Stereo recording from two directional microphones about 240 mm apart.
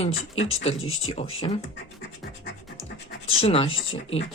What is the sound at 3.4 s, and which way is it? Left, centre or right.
Speech, left.